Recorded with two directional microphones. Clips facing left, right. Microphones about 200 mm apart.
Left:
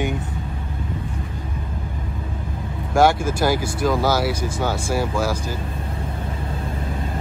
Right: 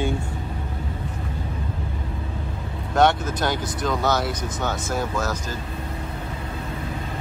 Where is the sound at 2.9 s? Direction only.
10° left (ahead or behind).